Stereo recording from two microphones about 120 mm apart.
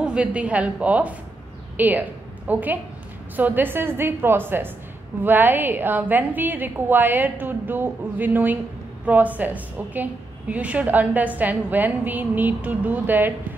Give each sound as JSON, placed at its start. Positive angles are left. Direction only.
{"t": 0.0, "sound": "a woman's voice", "side_deg": -10}